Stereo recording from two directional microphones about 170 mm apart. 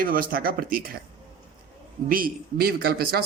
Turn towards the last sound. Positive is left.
turn(degrees=-65)  # may be behind; listen again after turning